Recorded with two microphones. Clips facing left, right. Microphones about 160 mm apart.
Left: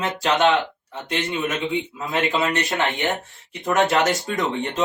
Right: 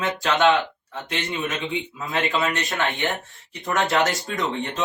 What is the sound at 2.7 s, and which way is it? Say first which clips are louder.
Speech: left 2 dB; 20° left (ahead or behind).